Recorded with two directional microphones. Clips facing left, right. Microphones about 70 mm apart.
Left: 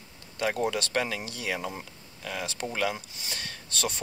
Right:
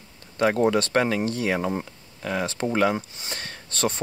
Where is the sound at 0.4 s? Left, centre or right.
Right.